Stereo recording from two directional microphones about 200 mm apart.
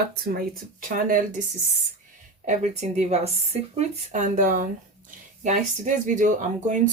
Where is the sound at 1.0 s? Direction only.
45° right (ahead or behind).